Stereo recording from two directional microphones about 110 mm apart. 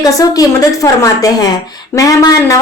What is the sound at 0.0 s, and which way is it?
A woman's voice, 35° left (ahead or behind).